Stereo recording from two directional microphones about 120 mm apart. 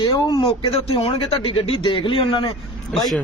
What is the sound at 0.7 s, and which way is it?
Speech, 50° left (ahead or behind).